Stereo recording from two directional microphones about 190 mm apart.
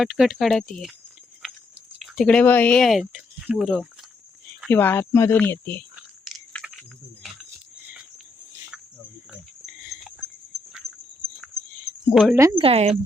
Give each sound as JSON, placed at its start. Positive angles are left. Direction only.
{"t": 0.0, "sound": "speech", "side_deg": -5}
{"t": 2.0, "sound": "speech", "side_deg": 0}
{"t": 4.7, "sound": "speech", "side_deg": 10}
{"t": 6.0, "sound": "biting", "side_deg": 0}
{"t": 9.3, "sound": "a sound", "side_deg": -5}
{"t": 12.1, "sound": "speech", "side_deg": 0}
{"t": 12.5, "sound": "speech", "side_deg": -30}